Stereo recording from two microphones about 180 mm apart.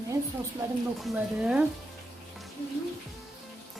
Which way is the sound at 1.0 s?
5° right (ahead or behind).